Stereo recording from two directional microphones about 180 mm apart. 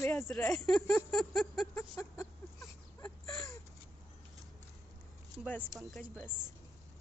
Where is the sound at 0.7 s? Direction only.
5° left (ahead or behind).